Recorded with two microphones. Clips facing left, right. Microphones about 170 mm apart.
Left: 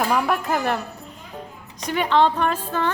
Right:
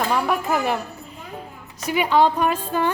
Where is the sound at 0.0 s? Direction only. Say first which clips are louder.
Even; 5° left (ahead or behind).